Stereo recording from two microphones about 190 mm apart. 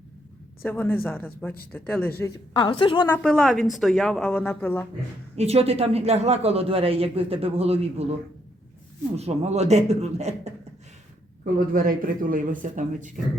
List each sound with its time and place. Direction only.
0.6 s speech: 10° left (ahead or behind)
2.2 s a woman's voice: 25° left (ahead or behind)
3.1 s a woman's voice: 5° left (ahead or behind)
5.4 s a man's voice: 30° right (ahead or behind)
9.1 s a man's voice: 35° right (ahead or behind)
11.7 s speech: 50° right (ahead or behind)